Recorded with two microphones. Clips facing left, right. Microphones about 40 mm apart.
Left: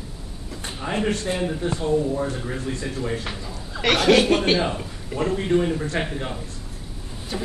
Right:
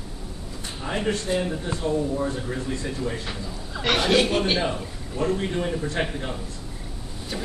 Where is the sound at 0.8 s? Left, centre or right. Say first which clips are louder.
Left 3 dB; left.